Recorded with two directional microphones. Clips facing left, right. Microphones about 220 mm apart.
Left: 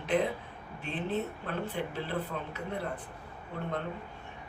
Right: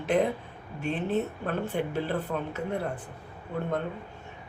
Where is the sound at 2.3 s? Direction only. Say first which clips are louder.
Right 6 dB; 50° right (ahead or behind).